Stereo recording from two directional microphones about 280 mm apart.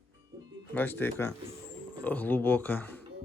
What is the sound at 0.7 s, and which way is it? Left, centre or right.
Speech, centre.